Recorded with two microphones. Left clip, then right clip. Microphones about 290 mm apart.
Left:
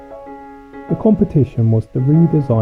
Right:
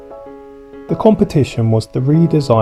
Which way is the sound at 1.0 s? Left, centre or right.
Right.